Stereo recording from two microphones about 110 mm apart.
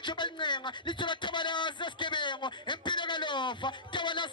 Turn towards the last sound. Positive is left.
turn(degrees=45)  # may be behind; listen again after turning